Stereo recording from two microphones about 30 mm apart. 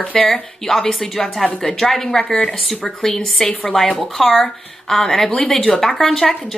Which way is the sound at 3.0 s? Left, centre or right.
Centre.